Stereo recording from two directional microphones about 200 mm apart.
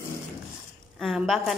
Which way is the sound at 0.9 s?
Centre (ahead or behind).